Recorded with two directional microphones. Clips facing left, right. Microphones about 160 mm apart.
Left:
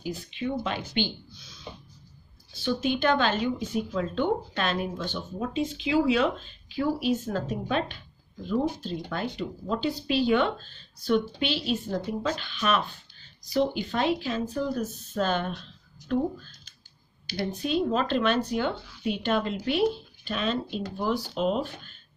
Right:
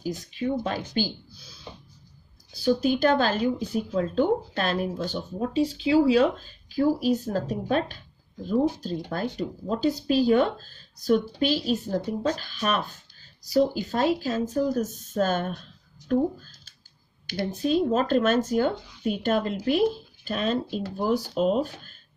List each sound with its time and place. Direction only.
0.0 s speech: 40° right (ahead or behind)
17.6 s speech: 40° right (ahead or behind)